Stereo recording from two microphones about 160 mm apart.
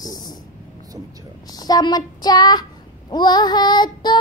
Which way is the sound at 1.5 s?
25° left (ahead or behind).